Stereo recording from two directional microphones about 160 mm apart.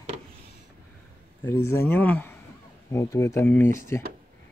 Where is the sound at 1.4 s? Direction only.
15° left (ahead or behind).